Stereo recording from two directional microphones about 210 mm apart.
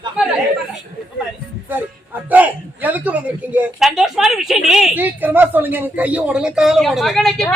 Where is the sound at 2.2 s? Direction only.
5° right (ahead or behind).